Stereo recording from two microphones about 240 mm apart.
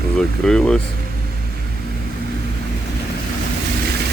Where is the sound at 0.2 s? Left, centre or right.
Centre.